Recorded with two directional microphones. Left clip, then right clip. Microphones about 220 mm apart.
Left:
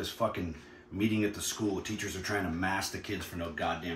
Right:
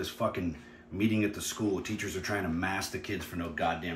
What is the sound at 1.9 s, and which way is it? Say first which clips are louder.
Speech: right 1 dB; 5° left (ahead or behind).